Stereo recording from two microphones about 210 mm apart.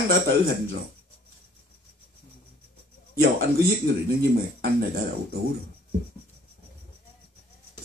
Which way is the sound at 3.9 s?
50° right (ahead or behind).